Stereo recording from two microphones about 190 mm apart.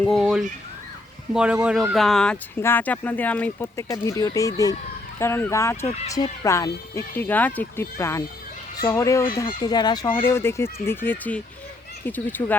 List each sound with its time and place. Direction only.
0.0 s speech: centre (ahead or behind)